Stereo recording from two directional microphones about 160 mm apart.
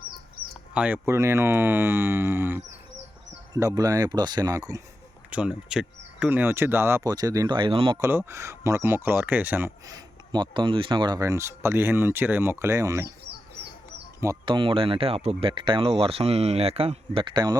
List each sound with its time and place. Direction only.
0.7 s speech: 5° right (ahead or behind)
1.0 s speech: 15° right (ahead or behind)
5.3 s speech: 5° right (ahead or behind); by 7.9 s 35° right (ahead or behind)
7.9 s speech: 15° right (ahead or behind)
9.8 s speech: 25° right (ahead or behind)
14.4 s speech: 30° right (ahead or behind)